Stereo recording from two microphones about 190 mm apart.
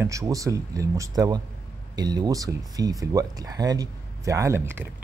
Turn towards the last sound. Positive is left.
turn(degrees=-10)  # may be behind; listen again after turning